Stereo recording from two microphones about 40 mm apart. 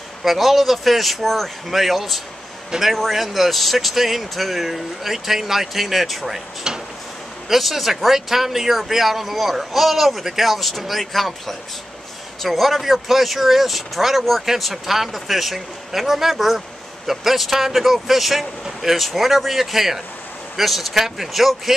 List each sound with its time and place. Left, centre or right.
0.2 s speech: centre
6.7 s drawer open or close: centre
7.4 s speech: centre